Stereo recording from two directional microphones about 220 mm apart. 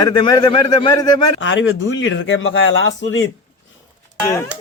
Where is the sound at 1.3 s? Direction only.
60° left (ahead or behind).